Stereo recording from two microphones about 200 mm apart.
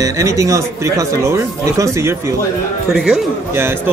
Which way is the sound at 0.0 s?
15° right (ahead or behind).